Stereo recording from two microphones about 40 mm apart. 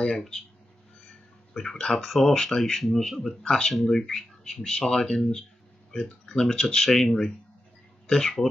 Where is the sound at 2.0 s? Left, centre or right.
Centre.